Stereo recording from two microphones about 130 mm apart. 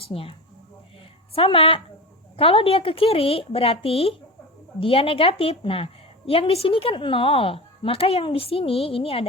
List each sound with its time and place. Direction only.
0.0 s a woman's voice: 45° left (ahead or behind)